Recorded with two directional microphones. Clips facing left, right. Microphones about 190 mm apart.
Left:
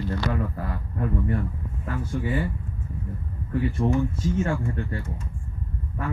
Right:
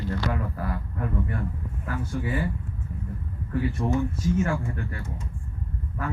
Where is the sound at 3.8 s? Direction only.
25° left (ahead or behind).